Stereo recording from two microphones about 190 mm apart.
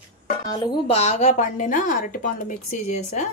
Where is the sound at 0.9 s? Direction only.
35° left (ahead or behind).